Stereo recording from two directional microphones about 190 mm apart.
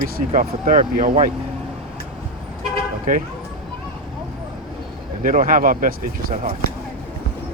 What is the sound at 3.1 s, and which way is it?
Speech, 45° right (ahead or behind).